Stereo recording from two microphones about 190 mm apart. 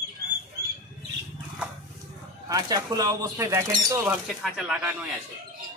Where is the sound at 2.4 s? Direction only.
20° right (ahead or behind).